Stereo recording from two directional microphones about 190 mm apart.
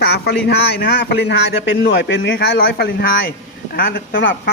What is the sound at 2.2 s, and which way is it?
A man's voice, 60° left (ahead or behind).